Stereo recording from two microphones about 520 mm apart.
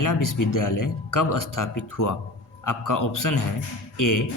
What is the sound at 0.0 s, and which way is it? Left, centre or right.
Speech, left.